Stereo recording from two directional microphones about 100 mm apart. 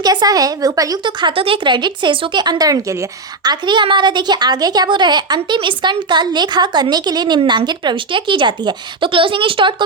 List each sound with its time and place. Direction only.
0.0 s a woman's voice: 40° right (ahead or behind)
3.4 s a woman's voice: 45° right (ahead or behind)